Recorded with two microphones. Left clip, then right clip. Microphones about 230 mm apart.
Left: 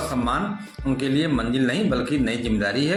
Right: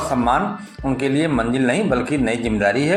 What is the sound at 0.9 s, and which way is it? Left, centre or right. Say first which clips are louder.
Speech: right 4 dB; left.